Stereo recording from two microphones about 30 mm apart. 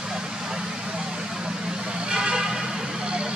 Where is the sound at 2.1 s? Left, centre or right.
Right.